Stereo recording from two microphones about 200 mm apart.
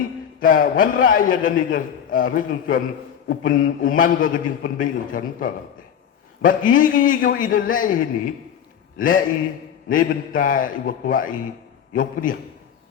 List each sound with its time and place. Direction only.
0.3 s a man's voice: 45° left (ahead or behind)
9.9 s a man's voice: 45° left (ahead or behind)